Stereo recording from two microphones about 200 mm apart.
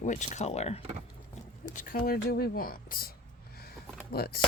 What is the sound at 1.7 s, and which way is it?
Speech, 45° left (ahead or behind).